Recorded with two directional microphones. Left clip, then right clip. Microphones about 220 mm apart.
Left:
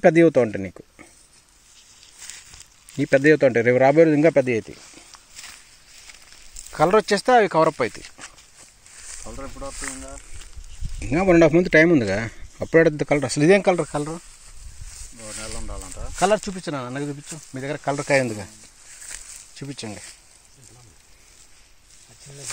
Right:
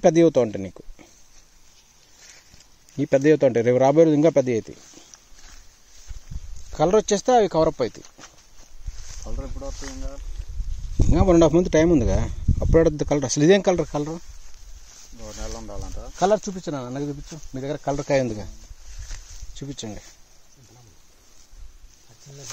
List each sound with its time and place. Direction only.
0.0 s speech: 5° left (ahead or behind)
3.0 s speech: centre (ahead or behind)
6.7 s speech: 10° right (ahead or behind)
16.2 s speech: 10° left (ahead or behind)
19.0 s a sound: 5° right (ahead or behind)